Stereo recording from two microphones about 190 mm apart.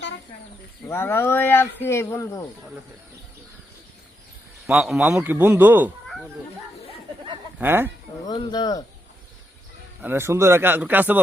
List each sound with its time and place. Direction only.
0.9 s speech: 10° left (ahead or behind)
4.6 s speech: centre (ahead or behind)
7.6 s speech: 10° right (ahead or behind)
8.3 s speech: 20° left (ahead or behind)
10.0 s speech: 10° right (ahead or behind)